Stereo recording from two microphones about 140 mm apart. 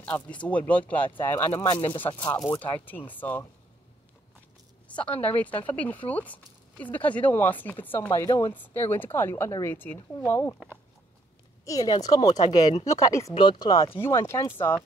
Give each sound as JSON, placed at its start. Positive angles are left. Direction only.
{"t": 0.0, "sound": "speech", "side_deg": 10}
{"t": 4.8, "sound": "a woman's voice", "side_deg": 10}
{"t": 11.6, "sound": "speech", "side_deg": 25}
{"t": 13.3, "sound": "speech", "side_deg": 35}
{"t": 13.8, "sound": "speech", "side_deg": 15}